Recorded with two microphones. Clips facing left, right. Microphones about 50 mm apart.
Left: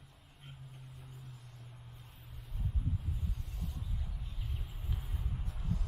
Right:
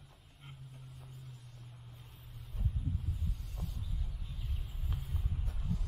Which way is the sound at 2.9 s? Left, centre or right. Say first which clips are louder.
Even; centre.